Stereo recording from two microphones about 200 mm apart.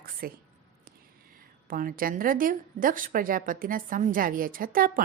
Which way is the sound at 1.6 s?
45° right (ahead or behind).